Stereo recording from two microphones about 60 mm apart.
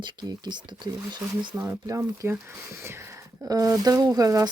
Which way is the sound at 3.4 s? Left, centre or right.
Right.